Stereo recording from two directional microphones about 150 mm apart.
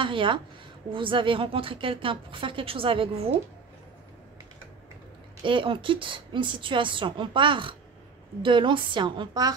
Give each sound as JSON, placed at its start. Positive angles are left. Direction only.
{"t": 0.0, "sound": "a woman's voice", "side_deg": -35}
{"t": 5.4, "sound": "a woman's voice", "side_deg": -35}